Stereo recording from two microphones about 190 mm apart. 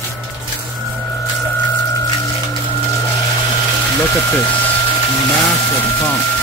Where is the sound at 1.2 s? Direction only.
15° left (ahead or behind).